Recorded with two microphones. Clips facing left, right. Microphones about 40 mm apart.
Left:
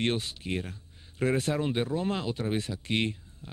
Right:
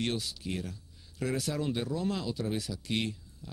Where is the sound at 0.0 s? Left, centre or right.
Left.